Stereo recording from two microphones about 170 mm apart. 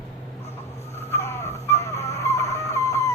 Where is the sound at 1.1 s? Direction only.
15° left (ahead or behind).